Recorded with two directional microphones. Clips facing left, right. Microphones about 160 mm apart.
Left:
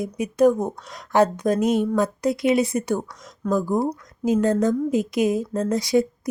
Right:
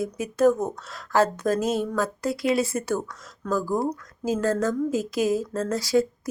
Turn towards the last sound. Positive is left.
turn(degrees=20)  # may be behind; listen again after turning